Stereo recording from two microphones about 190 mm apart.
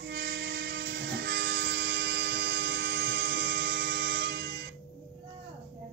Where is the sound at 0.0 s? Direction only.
65° right (ahead or behind).